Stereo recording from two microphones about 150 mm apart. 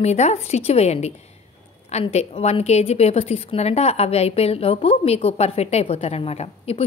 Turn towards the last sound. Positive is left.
turn(degrees=45)  # may be behind; listen again after turning